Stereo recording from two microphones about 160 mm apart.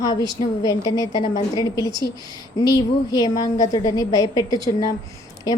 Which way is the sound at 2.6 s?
20° left (ahead or behind).